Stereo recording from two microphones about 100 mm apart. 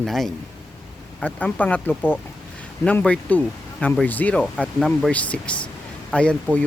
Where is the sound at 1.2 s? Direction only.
15° left (ahead or behind).